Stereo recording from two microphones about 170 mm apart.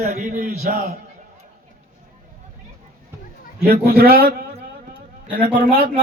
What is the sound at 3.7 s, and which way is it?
A man's voice, 65° right (ahead or behind).